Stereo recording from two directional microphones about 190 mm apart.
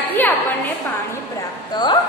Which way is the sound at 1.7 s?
25° left (ahead or behind).